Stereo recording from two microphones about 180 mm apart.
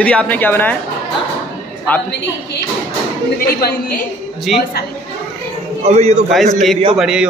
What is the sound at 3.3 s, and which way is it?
Speech, 55° left (ahead or behind).